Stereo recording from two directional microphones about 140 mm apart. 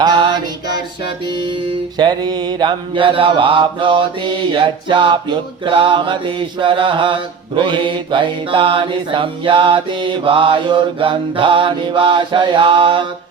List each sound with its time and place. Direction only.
0.0 s mantra: 35° right (ahead or behind)
2.0 s mantra: 30° right (ahead or behind)